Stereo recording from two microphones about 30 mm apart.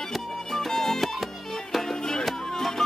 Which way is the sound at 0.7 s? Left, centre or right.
Centre.